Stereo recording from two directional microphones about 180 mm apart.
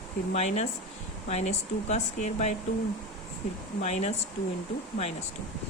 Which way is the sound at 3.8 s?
40° left (ahead or behind).